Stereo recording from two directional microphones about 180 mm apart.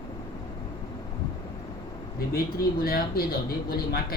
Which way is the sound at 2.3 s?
55° left (ahead or behind).